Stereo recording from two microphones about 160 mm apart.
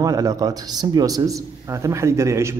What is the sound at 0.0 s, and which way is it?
A man's voice, 20° right (ahead or behind).